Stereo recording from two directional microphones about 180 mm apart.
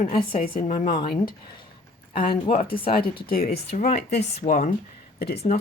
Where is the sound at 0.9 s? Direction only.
25° left (ahead or behind).